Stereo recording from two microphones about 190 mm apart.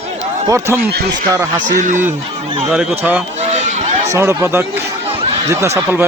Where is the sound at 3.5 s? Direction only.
35° right (ahead or behind).